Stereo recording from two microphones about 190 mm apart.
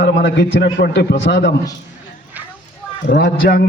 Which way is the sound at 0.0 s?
60° left (ahead or behind).